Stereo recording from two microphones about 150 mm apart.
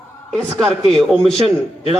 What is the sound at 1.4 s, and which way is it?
Speech, 40° right (ahead or behind).